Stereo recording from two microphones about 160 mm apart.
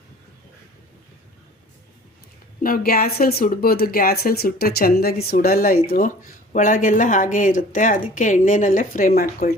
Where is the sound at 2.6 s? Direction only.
65° left (ahead or behind).